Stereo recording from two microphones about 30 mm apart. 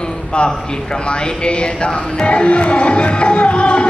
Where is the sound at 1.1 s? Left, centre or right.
Left.